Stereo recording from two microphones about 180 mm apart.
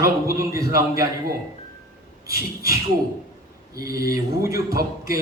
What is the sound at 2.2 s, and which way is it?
A man's voice, 15° right (ahead or behind).